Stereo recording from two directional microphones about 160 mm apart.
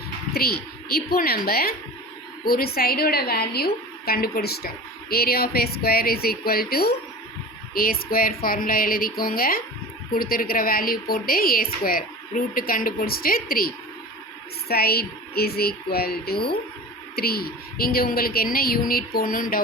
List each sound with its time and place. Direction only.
0.3 s a woman's voice: 70° left (ahead or behind)